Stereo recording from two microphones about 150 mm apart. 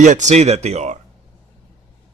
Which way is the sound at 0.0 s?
55° right (ahead or behind).